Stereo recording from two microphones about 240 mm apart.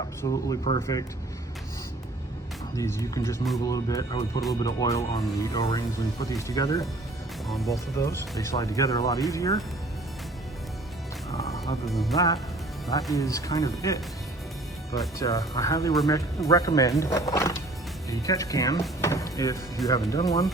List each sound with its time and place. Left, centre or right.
0.2 s speech: centre
2.7 s speech: centre
7.4 s speech: centre
7.9 s speech: centre
11.9 s speech: centre
13.1 s speech: centre
15.2 s speech: centre